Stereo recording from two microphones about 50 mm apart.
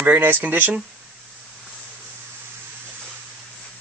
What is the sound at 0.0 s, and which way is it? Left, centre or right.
Speech, right.